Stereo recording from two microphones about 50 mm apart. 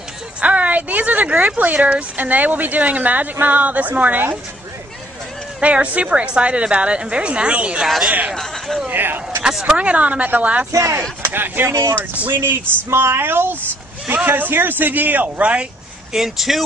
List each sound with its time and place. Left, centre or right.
0.4 s a woman's voice: right
5.6 s a woman's voice: right
8.4 s a sound: centre
8.9 s speech: right
9.5 s speech: centre
9.8 s a woman's voice: right
10.7 s speech: right
11.3 s speech: right
12.4 s a woman's voice: right
16.1 s speech: centre